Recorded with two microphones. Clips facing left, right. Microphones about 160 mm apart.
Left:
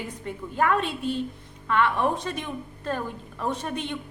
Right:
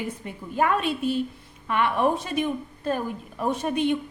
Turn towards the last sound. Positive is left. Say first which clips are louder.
# right 6 dB
turn(degrees=-15)  # may be behind; listen again after turning